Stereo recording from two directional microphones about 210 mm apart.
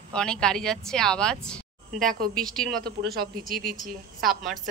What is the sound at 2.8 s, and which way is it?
Speech, 45° right (ahead or behind).